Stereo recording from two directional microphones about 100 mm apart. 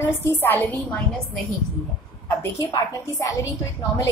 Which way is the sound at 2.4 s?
30° left (ahead or behind).